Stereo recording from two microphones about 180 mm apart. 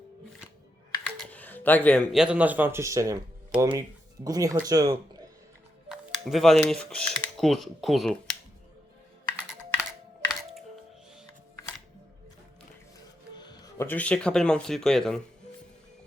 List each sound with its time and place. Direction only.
1.0 s speech: 5° left (ahead or behind); by 4.9 s 20° right (ahead or behind)
5.9 s speech: centre (ahead or behind)
13.4 s music: 25° left (ahead or behind)
13.8 s speech: 10° left (ahead or behind)